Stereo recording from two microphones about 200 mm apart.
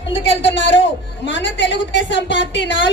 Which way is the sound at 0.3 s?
65° left (ahead or behind).